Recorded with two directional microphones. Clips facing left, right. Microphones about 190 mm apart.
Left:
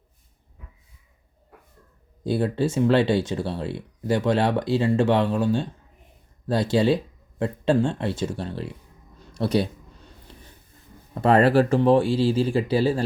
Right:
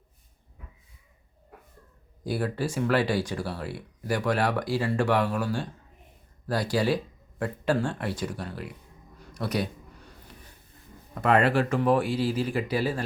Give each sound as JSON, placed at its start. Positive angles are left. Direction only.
{"t": 2.2, "sound": "speech", "side_deg": 25}
{"t": 9.1, "sound": "a sound", "side_deg": 30}
{"t": 11.1, "sound": "speech", "side_deg": 30}